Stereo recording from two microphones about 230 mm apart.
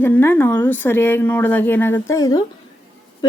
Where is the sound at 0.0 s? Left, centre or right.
Centre.